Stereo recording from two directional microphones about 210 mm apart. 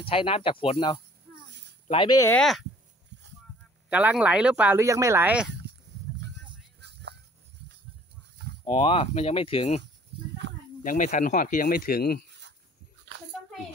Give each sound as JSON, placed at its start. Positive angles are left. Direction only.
{"t": 0.0, "sound": "speech", "side_deg": 25}
{"t": 3.9, "sound": "speech", "side_deg": -5}
{"t": 5.5, "sound": "a sound", "side_deg": -55}
{"t": 6.8, "sound": "music", "side_deg": -55}
{"t": 8.6, "sound": "speech", "side_deg": 25}
{"t": 10.4, "sound": "snake", "side_deg": -60}
{"t": 10.8, "sound": "speech", "side_deg": 40}